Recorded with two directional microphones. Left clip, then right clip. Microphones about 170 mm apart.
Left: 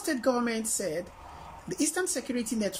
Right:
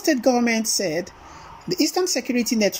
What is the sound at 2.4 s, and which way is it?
Speech, 15° right (ahead or behind).